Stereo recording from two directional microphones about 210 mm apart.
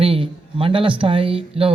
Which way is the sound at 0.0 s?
25° right (ahead or behind).